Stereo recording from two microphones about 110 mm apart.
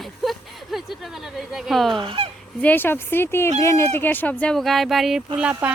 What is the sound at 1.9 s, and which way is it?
Fowl, 50° right (ahead or behind).